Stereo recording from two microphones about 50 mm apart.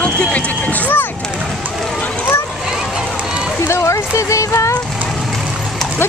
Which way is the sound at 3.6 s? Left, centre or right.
Left.